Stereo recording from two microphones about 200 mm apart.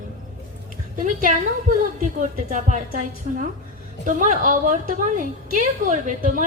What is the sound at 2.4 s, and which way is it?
Speech, 40° right (ahead or behind).